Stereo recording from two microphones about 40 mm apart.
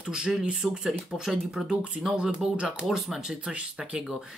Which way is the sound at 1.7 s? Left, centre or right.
Right.